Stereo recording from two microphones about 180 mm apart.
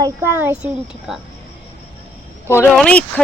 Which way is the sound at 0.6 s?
Centre (ahead or behind).